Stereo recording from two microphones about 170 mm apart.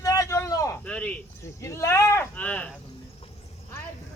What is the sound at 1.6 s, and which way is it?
Speech, 15° left (ahead or behind).